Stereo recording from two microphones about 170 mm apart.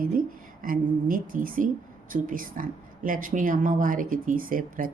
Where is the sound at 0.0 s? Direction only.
55° right (ahead or behind).